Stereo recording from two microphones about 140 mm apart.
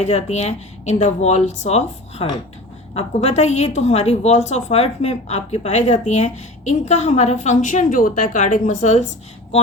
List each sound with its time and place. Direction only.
0.0 s a woman's voice: 55° left (ahead or behind)